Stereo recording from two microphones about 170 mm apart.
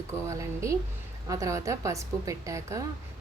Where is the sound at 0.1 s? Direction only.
20° right (ahead or behind).